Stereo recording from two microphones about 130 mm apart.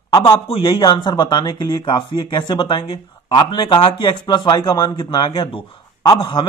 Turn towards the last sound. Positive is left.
turn(degrees=40)  # may be behind; listen again after turning